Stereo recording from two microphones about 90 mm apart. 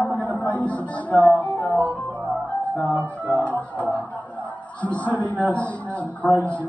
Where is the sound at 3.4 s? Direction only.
15° left (ahead or behind).